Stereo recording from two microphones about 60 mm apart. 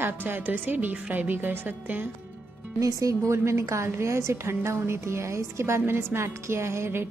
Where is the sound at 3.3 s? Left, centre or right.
Right.